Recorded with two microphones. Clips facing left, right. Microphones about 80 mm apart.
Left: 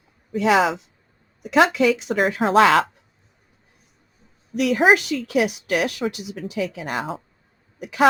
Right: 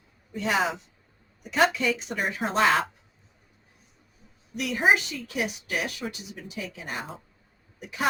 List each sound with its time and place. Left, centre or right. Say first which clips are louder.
0.3 s speech: left 8 dB; left
4.5 s a woman's voice: left 7 dB; left